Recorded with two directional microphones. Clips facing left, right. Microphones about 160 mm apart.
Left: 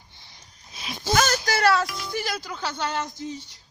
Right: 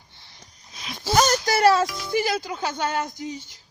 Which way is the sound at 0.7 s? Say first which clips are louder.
Left 1 dB; 5° left (ahead or behind).